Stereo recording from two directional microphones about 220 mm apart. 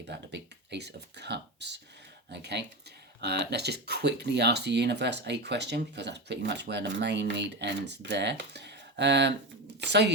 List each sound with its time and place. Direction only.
0.1 s speech: 50° right (ahead or behind)